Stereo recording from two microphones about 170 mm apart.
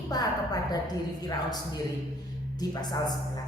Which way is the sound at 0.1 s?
20° left (ahead or behind).